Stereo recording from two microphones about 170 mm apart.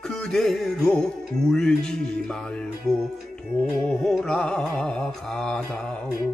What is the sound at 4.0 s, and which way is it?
Music, 5° left (ahead or behind).